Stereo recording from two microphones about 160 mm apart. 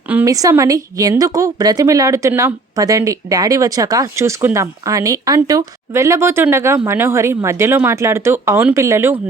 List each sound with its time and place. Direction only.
0.3 s a woman's voice: 20° right (ahead or behind)